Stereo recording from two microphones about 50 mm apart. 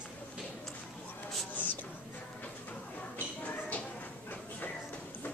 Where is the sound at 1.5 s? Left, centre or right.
Left.